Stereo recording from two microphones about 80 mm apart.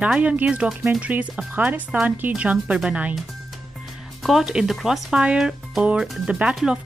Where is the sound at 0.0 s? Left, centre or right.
Centre.